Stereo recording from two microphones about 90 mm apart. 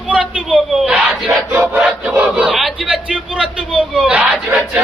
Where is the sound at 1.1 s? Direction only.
Centre (ahead or behind).